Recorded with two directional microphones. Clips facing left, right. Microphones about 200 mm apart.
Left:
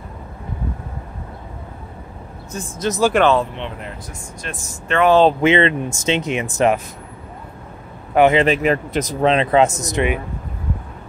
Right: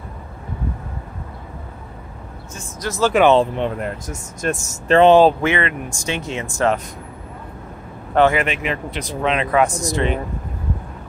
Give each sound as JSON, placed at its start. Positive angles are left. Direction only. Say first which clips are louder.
{"t": 2.8, "sound": "speech", "louder": "left 2 dB", "side_deg": 20}
{"t": 3.5, "sound": "speech", "louder": "right 7 dB", "side_deg": -45}
{"t": 5.4, "sound": "speech", "louder": "left 5 dB", "side_deg": 25}
{"t": 8.1, "sound": "speech", "louder": "left 2 dB", "side_deg": 15}
{"t": 8.4, "sound": "speech", "louder": "left 6 dB", "side_deg": 40}